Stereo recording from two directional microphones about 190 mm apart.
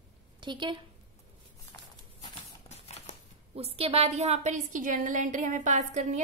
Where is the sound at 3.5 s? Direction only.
30° right (ahead or behind).